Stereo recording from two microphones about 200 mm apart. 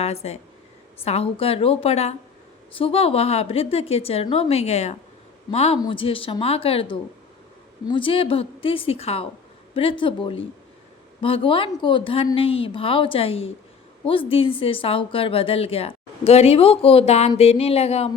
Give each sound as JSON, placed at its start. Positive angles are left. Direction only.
{"t": 0.0, "sound": "a woman's voice", "side_deg": 30}